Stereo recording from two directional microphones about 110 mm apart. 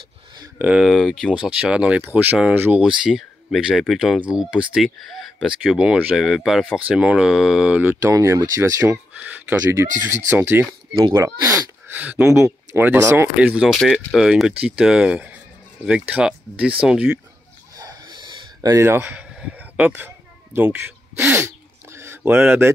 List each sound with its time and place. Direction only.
0.6 s speech: 10° right (ahead or behind)
0.8 s speech: centre (ahead or behind)
1.3 s speech: 10° right (ahead or behind)
6.1 s speech: centre (ahead or behind)
8.1 s speech: 25° right (ahead or behind)
8.9 s speech: 15° right (ahead or behind); by 11.7 s 30° right (ahead or behind)
11.9 s speech: 15° right (ahead or behind)
13.4 s speech: 10° right (ahead or behind)
17.7 s a sound: 35° right (ahead or behind)
18.9 s speech: 20° right (ahead or behind)
19.1 s a sound: 10° right (ahead or behind)
20.5 s speech: 20° right (ahead or behind)
21.3 s a sound: 25° right (ahead or behind)